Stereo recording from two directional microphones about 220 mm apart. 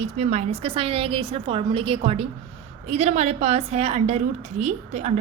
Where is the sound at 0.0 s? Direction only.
30° right (ahead or behind).